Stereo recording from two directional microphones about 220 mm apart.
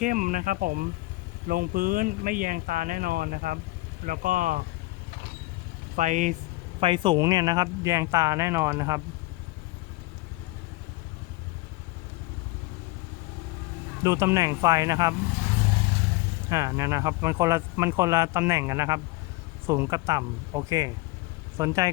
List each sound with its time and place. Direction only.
0.0 s speech: 35° right (ahead or behind)
6.0 s speech: 35° right (ahead or behind)
6.7 s speech: 25° right (ahead or behind)
14.0 s speech: 10° right (ahead or behind)
16.5 s speech: 15° right (ahead or behind)